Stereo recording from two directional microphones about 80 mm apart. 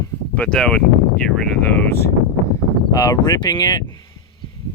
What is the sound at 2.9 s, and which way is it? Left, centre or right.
Speech, left.